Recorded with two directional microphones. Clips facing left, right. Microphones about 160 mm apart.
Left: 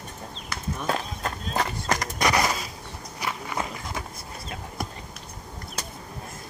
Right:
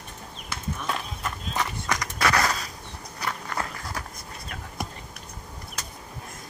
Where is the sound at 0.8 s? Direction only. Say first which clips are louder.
Left 5 dB; 35° left (ahead or behind).